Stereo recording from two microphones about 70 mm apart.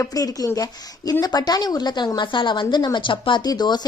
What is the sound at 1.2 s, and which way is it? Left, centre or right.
A woman's voice, left.